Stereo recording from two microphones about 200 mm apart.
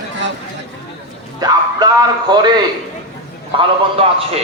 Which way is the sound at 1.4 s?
20° right (ahead or behind).